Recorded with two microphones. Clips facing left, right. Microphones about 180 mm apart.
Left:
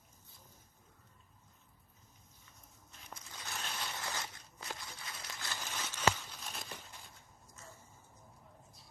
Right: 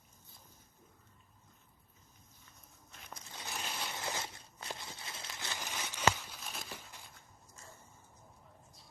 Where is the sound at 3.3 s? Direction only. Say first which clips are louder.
Right 2 dB; 20° right (ahead or behind).